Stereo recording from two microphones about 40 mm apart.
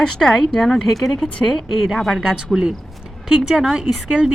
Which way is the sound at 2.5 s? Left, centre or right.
Centre.